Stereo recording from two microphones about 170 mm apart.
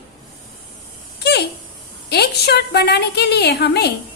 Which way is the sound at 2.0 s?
70° left (ahead or behind).